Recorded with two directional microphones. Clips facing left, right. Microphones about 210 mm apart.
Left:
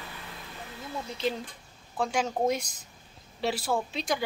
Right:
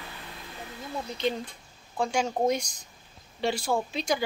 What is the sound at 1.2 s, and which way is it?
A woman's voice, centre (ahead or behind).